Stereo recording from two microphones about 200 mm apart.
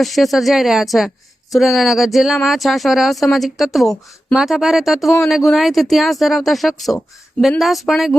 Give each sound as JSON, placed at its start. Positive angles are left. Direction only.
{"t": 0.0, "sound": "speech", "side_deg": 0}